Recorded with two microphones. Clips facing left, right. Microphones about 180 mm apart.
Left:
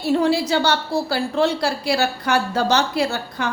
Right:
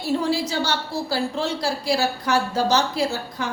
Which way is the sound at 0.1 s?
65° left (ahead or behind).